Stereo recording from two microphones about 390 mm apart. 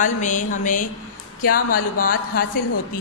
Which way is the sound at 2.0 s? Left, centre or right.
Left.